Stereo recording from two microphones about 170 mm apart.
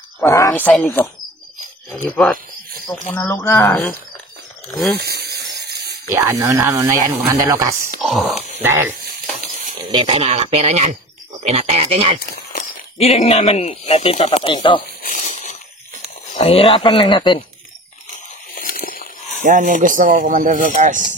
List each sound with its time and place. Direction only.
0.2 s a sound: 15° left (ahead or behind)
0.7 s a woman's voice: 5° left (ahead or behind)
2.9 s speech: 10° left (ahead or behind)
4.9 s a sound: 70° right (ahead or behind)
6.1 s speech: 15° right (ahead or behind)
8.0 s a woman's voice: centre (ahead or behind)
8.6 s speech: 15° right (ahead or behind)
9.8 s speech: 30° right (ahead or behind)
12.2 s speech: 50° left (ahead or behind); by 14.8 s 25° left (ahead or behind)
15.0 s a sound: 45° left (ahead or behind)
16.3 s speech: 35° left (ahead or behind)
18.5 s snake: 55° left (ahead or behind)
19.4 s speech: 50° right (ahead or behind)